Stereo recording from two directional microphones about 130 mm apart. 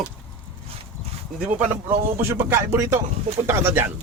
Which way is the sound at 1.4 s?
10° right (ahead or behind).